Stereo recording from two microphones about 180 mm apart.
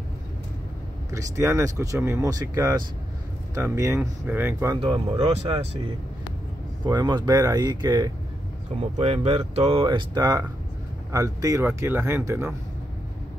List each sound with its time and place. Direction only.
1.1 s speech: 15° right (ahead or behind)
4.7 s speech: 30° right (ahead or behind)
6.9 s speech: 25° right (ahead or behind)
8.9 s speech: 35° right (ahead or behind); by 12.4 s 15° right (ahead or behind)